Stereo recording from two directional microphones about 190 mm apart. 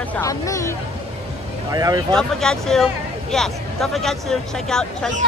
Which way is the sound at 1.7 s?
20° right (ahead or behind).